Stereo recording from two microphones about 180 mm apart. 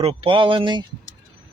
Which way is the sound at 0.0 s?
35° right (ahead or behind).